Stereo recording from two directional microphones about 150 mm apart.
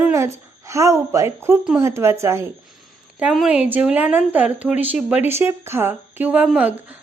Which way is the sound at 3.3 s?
5° right (ahead or behind).